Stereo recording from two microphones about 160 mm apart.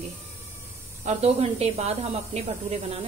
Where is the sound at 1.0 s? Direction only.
40° right (ahead or behind).